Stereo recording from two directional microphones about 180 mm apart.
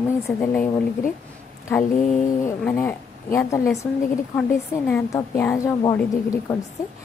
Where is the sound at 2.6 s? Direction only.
10° left (ahead or behind).